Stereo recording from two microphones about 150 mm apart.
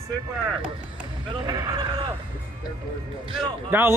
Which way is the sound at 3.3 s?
15° right (ahead or behind).